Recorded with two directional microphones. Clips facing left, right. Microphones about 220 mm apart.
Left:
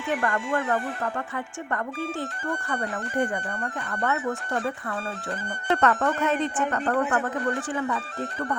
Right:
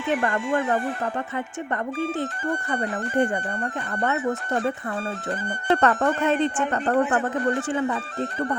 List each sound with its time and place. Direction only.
0.1 s speech: 20° right (ahead or behind)
2.6 s speech: 20° right (ahead or behind)